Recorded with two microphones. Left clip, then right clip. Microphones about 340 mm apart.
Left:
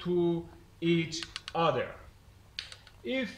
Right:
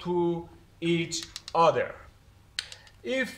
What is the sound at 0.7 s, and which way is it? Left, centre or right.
Speech, centre.